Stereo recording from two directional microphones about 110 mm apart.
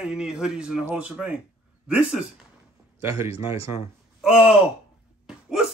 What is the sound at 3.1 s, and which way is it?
Speech, 25° right (ahead or behind).